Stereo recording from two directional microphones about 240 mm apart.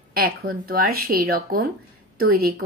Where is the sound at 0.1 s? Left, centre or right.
Right.